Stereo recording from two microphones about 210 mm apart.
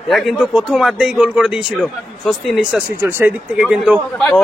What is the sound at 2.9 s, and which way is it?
Speech, 10° right (ahead or behind).